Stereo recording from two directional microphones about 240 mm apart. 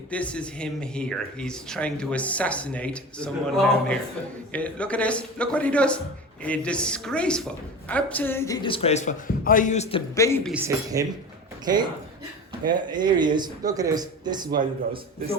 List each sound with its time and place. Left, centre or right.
0.1 s speech: centre
8.6 s a man's voice: left
10.2 s speech: centre
10.4 s speech: centre